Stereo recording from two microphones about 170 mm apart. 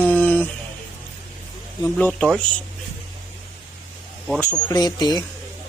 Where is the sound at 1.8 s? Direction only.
10° left (ahead or behind).